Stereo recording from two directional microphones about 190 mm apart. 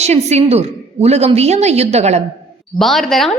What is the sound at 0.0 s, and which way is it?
A woman's voice, 35° right (ahead or behind).